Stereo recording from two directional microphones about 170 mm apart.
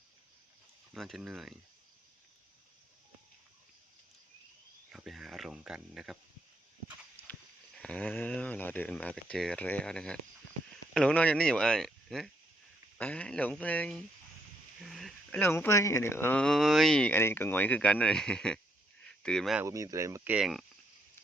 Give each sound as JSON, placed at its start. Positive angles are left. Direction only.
{"t": 0.9, "sound": "speech", "side_deg": 0}
{"t": 4.9, "sound": "a sound", "side_deg": 0}
{"t": 7.8, "sound": "speech", "side_deg": 5}
{"t": 14.8, "sound": "a sound", "side_deg": 0}
{"t": 15.4, "sound": "speech", "side_deg": 15}
{"t": 19.6, "sound": "speech", "side_deg": -20}
{"t": 20.3, "sound": "speech", "side_deg": 0}